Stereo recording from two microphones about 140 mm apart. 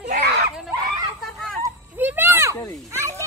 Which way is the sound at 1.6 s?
15° right (ahead or behind).